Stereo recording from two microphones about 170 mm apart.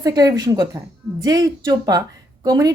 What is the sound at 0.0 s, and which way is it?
A woman's voice, 20° right (ahead or behind).